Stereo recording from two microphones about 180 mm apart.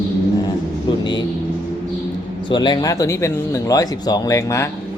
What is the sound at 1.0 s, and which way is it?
Speech, 25° left (ahead or behind).